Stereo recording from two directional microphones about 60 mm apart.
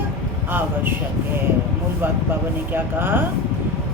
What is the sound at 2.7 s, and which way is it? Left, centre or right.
Speech, right.